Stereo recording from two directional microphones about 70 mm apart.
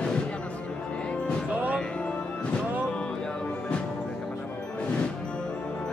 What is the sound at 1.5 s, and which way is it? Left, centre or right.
Music, right.